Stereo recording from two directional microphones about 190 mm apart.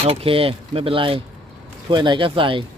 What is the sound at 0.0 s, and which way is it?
Speech, 30° right (ahead or behind).